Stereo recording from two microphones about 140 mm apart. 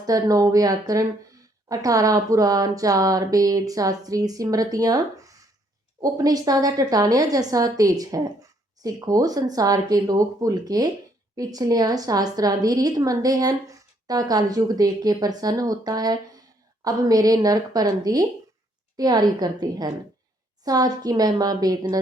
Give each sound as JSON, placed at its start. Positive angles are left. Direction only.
{"t": 0.0, "sound": "a woman's voice", "side_deg": -25}